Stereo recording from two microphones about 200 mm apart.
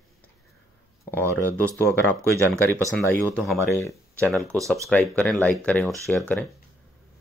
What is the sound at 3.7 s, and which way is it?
Speech, 15° left (ahead or behind).